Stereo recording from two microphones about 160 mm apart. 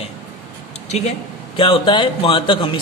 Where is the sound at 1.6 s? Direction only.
30° left (ahead or behind).